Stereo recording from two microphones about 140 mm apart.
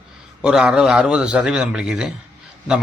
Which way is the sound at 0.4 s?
5° right (ahead or behind).